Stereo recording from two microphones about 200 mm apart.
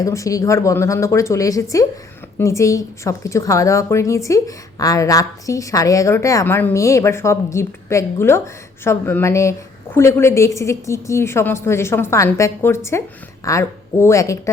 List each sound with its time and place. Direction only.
0.0 s a woman's voice: 15° left (ahead or behind)